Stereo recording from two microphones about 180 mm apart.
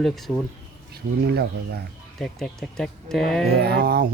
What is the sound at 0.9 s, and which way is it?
Speech, 60° right (ahead or behind).